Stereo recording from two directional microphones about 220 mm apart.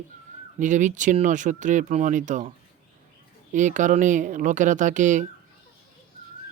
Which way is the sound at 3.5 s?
35° right (ahead or behind).